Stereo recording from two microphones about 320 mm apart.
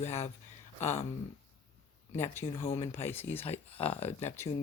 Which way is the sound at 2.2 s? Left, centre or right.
Centre.